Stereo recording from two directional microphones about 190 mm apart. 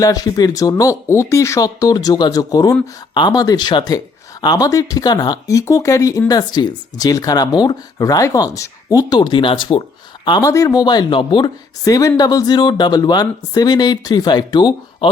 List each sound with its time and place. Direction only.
0.0 s speech: 20° left (ahead or behind)